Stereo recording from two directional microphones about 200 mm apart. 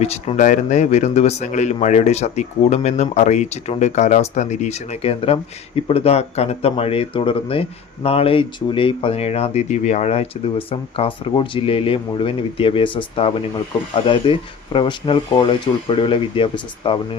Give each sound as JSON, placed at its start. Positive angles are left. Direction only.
{"t": 0.0, "sound": "speech", "side_deg": 30}